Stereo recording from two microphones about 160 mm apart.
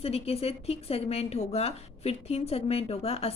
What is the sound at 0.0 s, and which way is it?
A woman's voice, 40° left (ahead or behind).